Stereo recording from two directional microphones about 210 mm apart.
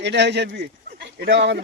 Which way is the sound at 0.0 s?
55° right (ahead or behind).